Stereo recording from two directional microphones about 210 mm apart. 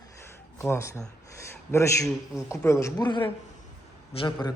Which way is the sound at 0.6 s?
15° left (ahead or behind).